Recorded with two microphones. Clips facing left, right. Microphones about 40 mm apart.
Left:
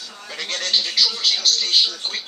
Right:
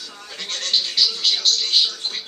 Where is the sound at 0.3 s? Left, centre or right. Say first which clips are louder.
Left 1 dB; left.